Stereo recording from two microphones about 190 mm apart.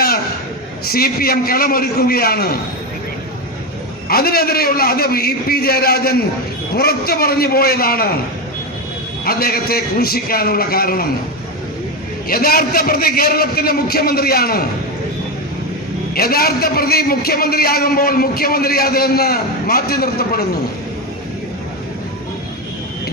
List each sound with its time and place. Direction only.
0.9 s a man's voice: 50° left (ahead or behind)
4.1 s a man's voice: 55° left (ahead or behind)
9.2 s a man's voice: 55° left (ahead or behind)
12.3 s a man's voice: 50° left (ahead or behind)
16.1 s a man's voice: 55° left (ahead or behind)